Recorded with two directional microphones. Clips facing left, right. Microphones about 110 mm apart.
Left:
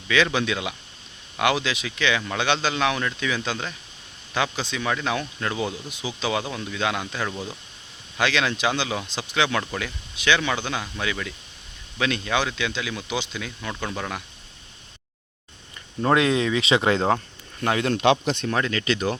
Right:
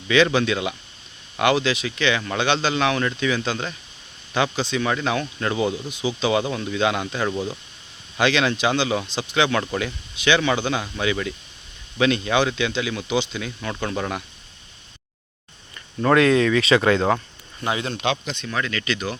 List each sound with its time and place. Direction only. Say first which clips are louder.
0.1 s speech: right 4 dB; 5° left (ahead or behind)
16.0 s speech: right 4 dB; 20° left (ahead or behind)
17.6 s speech: left 3 dB; 55° left (ahead or behind)
18.4 s speech: even; 30° left (ahead or behind)